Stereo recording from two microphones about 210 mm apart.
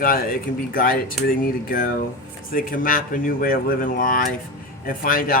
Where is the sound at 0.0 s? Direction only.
45° left (ahead or behind).